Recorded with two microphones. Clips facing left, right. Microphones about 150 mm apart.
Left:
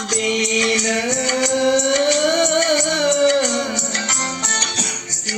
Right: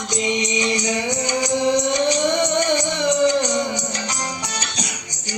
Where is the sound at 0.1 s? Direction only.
20° right (ahead or behind).